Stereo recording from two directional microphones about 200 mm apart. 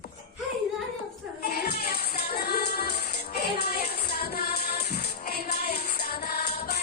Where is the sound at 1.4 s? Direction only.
50° left (ahead or behind).